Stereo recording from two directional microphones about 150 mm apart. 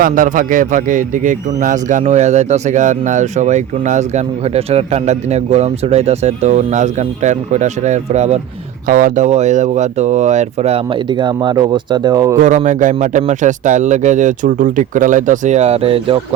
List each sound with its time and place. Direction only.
0.0 s a man's voice: 65° right (ahead or behind); by 8.4 s 50° right (ahead or behind)
8.9 s a man's voice: 65° right (ahead or behind); by 12.4 s 25° right (ahead or behind)
12.4 s speech: 55° right (ahead or behind); by 16.2 s 40° right (ahead or behind)